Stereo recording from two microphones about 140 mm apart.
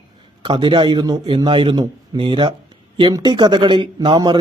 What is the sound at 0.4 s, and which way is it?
A man's voice, 35° right (ahead or behind).